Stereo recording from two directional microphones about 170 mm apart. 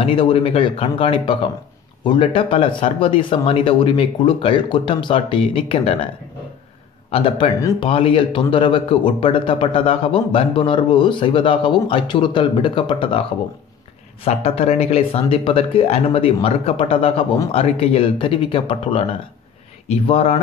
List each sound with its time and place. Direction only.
0.0 s a man's voice: 30° left (ahead or behind)
7.1 s a man's voice: 30° left (ahead or behind)
14.2 s a man's voice: 35° left (ahead or behind)